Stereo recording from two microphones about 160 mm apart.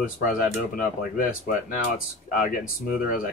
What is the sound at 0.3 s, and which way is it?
Speech, 60° left (ahead or behind).